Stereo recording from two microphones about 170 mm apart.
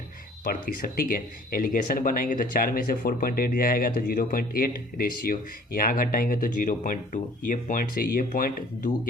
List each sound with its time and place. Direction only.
0.4 s speech: 55° left (ahead or behind)